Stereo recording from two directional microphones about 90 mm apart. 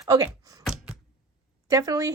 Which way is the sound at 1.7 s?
40° right (ahead or behind).